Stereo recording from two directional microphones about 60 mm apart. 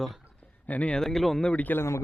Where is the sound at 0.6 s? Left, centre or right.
Left.